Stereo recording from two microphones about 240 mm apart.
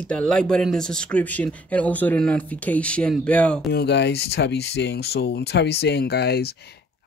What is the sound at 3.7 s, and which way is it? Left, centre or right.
Speech, left.